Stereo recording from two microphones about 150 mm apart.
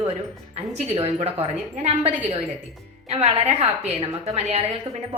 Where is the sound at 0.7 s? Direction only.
45° right (ahead or behind).